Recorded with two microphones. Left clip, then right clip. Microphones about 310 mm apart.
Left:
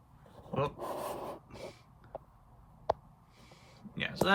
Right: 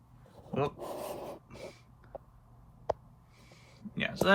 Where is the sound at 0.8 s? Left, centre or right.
Centre.